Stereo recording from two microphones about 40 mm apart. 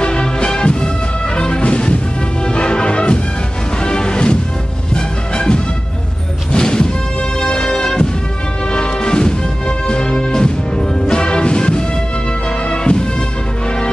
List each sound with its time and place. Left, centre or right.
0.0 s music: left